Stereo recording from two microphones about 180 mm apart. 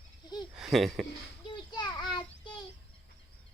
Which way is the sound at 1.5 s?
25° left (ahead or behind).